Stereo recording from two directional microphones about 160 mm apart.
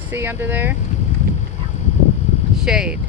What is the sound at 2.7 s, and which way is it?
Speech, 5° right (ahead or behind).